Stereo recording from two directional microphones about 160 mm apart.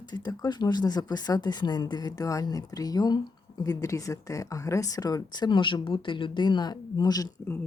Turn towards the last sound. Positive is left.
turn(degrees=25)  # may be behind; listen again after turning